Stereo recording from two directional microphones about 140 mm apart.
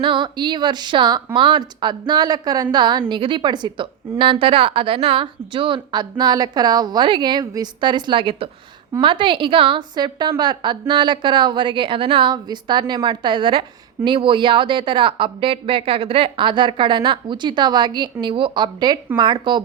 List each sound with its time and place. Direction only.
0.0 s a woman's voice: 35° right (ahead or behind)